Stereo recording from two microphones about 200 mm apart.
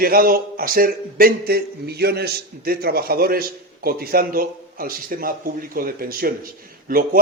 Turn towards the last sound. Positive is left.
turn(degrees=-45)  # may be behind; listen again after turning